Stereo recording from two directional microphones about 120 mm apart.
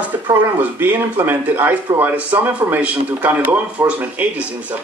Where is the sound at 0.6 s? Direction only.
15° right (ahead or behind).